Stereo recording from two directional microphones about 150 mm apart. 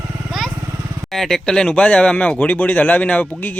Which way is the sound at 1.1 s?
Centre (ahead or behind).